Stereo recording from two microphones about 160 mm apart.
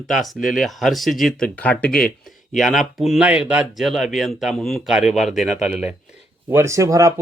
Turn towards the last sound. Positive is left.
turn(degrees=-20)  # may be behind; listen again after turning